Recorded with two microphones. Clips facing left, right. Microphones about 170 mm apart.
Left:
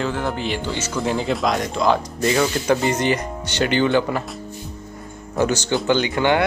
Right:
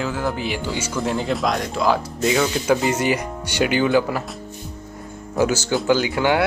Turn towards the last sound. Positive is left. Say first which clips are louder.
# left 1 dB
turn(degrees=-5)  # may be behind; listen again after turning